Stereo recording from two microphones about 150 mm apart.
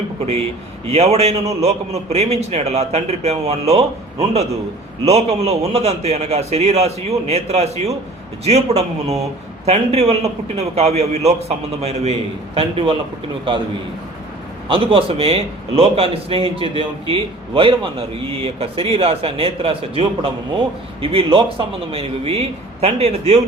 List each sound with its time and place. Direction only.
0.9 s a man's voice: 45° right (ahead or behind)
14.7 s a man's voice: 40° right (ahead or behind)